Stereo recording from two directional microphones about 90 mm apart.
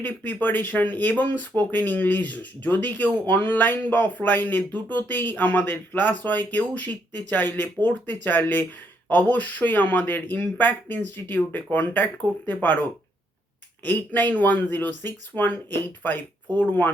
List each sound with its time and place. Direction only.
0.0 s speech: 20° left (ahead or behind)
13.8 s speech: 20° left (ahead or behind)
16.6 s speech: 20° left (ahead or behind)